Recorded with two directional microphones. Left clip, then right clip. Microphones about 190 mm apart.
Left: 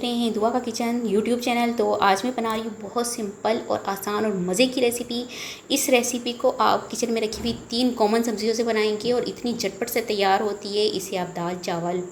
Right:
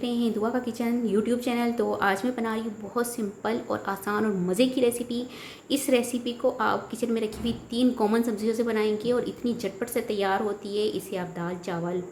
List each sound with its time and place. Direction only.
0.0 s a woman's voice: centre (ahead or behind)